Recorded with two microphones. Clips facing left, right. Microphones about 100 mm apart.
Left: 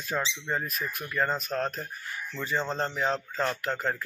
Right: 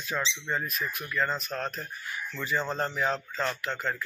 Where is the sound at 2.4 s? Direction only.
30° left (ahead or behind).